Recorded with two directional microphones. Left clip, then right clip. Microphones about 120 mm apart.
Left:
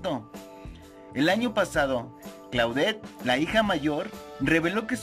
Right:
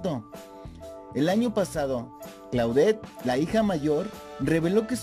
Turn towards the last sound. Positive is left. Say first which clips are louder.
# even
turn(degrees=-50)  # may be behind; listen again after turning